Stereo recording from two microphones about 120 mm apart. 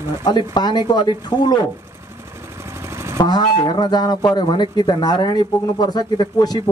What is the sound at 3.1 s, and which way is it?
Speech, 35° left (ahead or behind).